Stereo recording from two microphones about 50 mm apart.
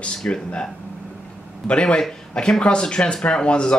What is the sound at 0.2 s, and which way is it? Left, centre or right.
Speech, centre.